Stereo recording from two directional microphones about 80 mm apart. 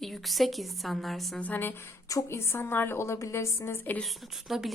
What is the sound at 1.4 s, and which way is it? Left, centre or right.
A woman's voice, left.